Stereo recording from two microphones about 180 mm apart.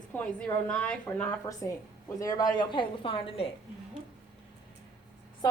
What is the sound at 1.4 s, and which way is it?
A woman's voice, 20° left (ahead or behind).